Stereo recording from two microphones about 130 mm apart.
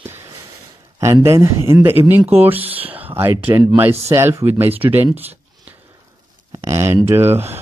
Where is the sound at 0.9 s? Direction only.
25° right (ahead or behind).